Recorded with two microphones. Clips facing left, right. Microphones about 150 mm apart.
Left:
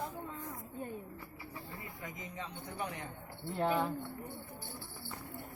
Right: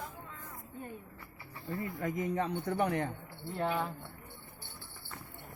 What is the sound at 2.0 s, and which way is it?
A man's voice, 55° right (ahead or behind).